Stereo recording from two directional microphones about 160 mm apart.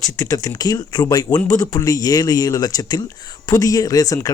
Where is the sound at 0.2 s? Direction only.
20° left (ahead or behind).